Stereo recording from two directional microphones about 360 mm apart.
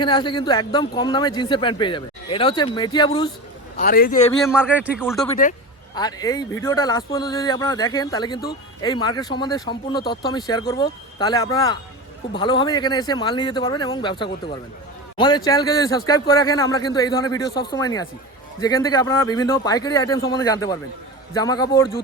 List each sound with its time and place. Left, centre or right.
0.0 s a man's voice: centre
3.8 s a man's voice: left
4.4 s speech: centre
5.4 s a man's voice: centre